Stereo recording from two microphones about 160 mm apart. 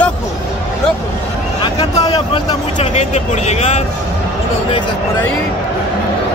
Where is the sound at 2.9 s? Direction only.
45° left (ahead or behind).